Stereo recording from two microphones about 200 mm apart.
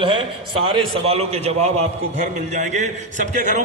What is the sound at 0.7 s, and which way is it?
A man's voice, 30° right (ahead or behind).